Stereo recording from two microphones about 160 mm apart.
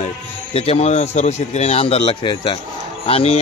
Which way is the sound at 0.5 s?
40° left (ahead or behind).